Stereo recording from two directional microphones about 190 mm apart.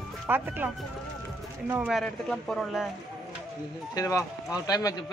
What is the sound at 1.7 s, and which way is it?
Speech, 5° right (ahead or behind).